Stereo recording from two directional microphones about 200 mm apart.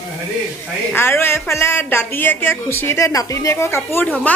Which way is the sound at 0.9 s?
10° left (ahead or behind).